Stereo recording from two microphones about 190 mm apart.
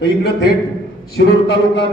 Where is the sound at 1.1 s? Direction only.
65° left (ahead or behind).